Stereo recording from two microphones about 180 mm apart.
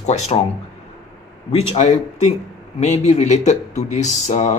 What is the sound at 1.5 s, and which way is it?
A man's voice, 35° left (ahead or behind).